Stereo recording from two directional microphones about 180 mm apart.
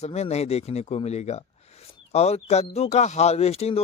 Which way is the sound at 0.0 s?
35° left (ahead or behind).